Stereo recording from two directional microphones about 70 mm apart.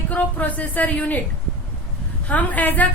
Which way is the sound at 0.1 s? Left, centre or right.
Left.